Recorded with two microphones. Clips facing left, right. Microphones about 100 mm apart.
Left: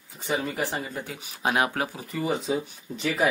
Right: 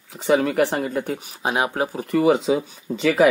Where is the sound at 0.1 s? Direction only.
80° right; by 1.1 s 60° right (ahead or behind).